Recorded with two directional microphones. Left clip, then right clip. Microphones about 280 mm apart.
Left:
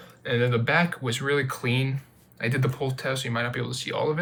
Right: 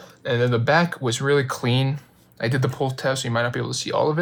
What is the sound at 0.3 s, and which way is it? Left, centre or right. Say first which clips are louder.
Speech: right 4 dB; centre.